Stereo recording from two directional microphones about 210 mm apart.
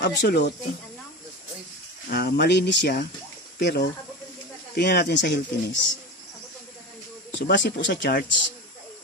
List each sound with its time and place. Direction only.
0.0 s speech: 55° left (ahead or behind)
2.0 s speech: 45° left (ahead or behind)
7.3 s speech: 60° left (ahead or behind)